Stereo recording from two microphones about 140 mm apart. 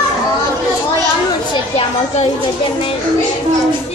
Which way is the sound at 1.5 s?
45° left (ahead or behind).